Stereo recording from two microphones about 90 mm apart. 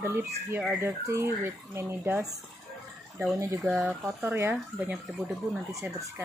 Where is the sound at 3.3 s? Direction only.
35° right (ahead or behind).